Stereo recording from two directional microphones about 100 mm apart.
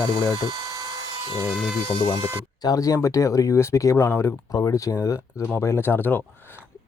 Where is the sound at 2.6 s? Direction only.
35° left (ahead or behind).